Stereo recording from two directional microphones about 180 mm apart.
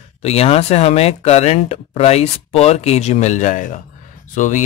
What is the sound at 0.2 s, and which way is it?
Speech, 35° left (ahead or behind).